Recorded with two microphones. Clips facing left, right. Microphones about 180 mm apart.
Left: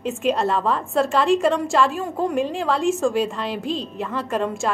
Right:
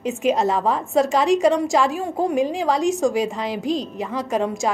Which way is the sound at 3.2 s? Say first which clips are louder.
Right 1 dB; 15° right (ahead or behind).